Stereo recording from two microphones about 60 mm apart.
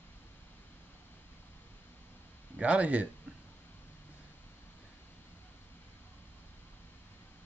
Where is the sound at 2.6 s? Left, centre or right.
Right.